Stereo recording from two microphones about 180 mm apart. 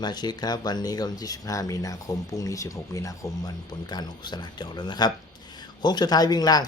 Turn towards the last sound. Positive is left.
turn(degrees=20)  # may be behind; listen again after turning